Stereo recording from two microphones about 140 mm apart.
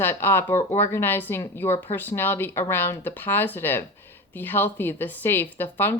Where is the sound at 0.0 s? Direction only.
15° left (ahead or behind).